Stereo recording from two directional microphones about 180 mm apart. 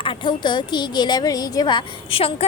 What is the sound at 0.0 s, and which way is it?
A woman's voice, 30° left (ahead or behind).